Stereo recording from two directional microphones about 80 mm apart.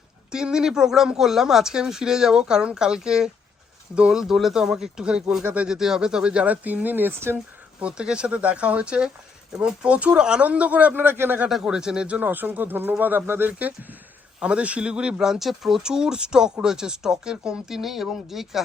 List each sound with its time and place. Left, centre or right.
0.3 s speech: centre
5.4 s speech: right
5.6 s speech: centre; by 7.3 s right
7.8 s speech: centre
11.4 s speech: centre